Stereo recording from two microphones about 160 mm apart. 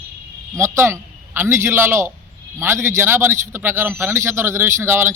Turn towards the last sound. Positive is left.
turn(degrees=-15)  # may be behind; listen again after turning